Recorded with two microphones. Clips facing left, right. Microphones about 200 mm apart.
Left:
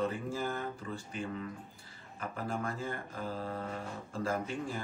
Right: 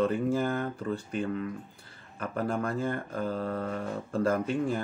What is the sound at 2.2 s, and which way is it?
Speech, 60° right (ahead or behind).